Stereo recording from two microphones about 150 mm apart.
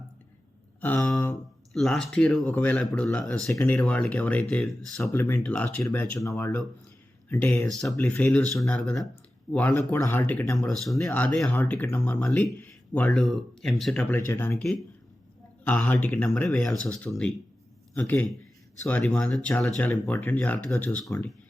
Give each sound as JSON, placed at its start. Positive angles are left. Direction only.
{"t": 0.8, "sound": "a sound", "side_deg": 10}
{"t": 1.7, "sound": "speech", "side_deg": 0}
{"t": 7.7, "sound": "speech", "side_deg": 0}
{"t": 14.6, "sound": "speech", "side_deg": 0}